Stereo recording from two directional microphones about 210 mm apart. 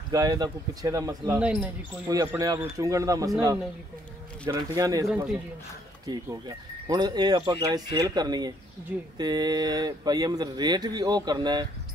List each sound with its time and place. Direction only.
0.1 s speech: 20° right (ahead or behind)
2.0 s speech: 15° right (ahead or behind)
5.0 s speech: centre (ahead or behind)
6.0 s speech: 20° right (ahead or behind)